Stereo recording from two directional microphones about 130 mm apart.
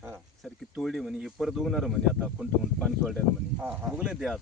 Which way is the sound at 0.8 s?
Centre (ahead or behind).